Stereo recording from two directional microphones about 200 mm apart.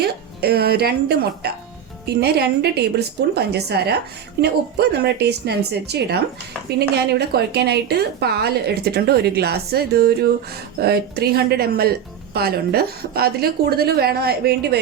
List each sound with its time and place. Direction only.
0.0 s a woman's voice: 50° right (ahead or behind)